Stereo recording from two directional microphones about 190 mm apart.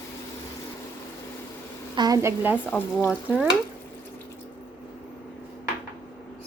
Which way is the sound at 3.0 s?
5° right (ahead or behind).